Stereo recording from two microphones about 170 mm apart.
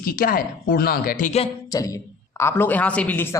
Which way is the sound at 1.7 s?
20° left (ahead or behind).